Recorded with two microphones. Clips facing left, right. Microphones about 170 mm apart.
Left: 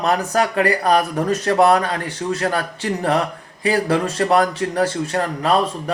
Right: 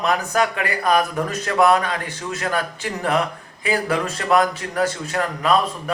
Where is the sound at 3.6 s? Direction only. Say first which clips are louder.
Left 4 dB; 30° left (ahead or behind).